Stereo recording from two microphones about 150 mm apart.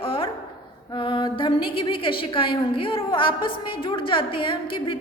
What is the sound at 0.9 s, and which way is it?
A woman's voice, 35° left (ahead or behind).